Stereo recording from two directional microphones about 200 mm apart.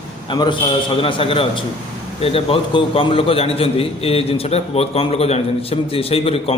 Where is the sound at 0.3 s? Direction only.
25° left (ahead or behind).